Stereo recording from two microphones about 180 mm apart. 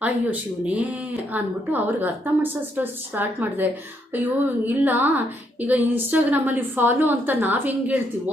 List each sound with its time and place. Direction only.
0.0 s speech: 10° right (ahead or behind)